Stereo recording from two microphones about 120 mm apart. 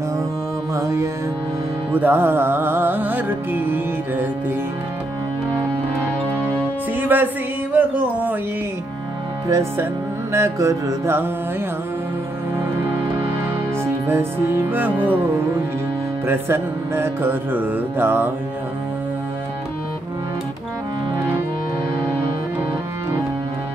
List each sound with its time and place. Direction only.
0.7 s music: 25° right (ahead or behind)
7.0 s music: 15° right (ahead or behind)
9.5 s music: 25° right (ahead or behind)
13.8 s music: 20° right (ahead or behind)